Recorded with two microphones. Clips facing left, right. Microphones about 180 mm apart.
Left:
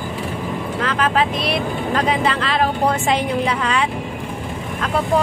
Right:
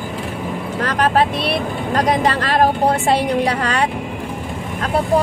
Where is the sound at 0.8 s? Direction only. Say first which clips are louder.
Right 3 dB; 40° right (ahead or behind).